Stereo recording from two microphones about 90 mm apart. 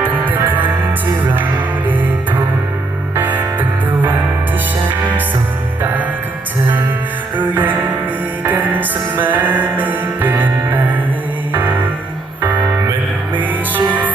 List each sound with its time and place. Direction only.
0.0 s music: 20° right (ahead or behind)
3.2 s music: 20° right (ahead or behind)
5.8 s music: 20° right (ahead or behind)
7.3 s music: 20° right (ahead or behind)